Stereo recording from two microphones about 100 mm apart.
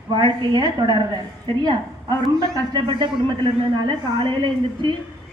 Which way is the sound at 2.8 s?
55° right (ahead or behind).